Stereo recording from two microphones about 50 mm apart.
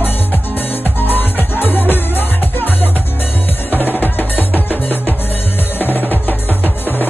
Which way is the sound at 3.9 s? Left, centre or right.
Left.